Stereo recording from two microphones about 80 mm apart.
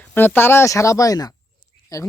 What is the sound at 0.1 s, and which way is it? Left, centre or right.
Speech, left.